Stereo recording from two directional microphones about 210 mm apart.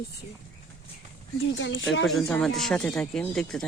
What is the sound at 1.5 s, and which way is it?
Speech, 60° left (ahead or behind).